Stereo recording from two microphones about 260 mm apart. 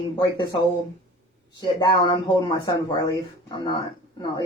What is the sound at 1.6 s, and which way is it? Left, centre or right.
Speech, centre.